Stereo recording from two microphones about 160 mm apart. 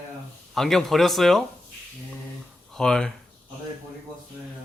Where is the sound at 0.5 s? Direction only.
Centre (ahead or behind).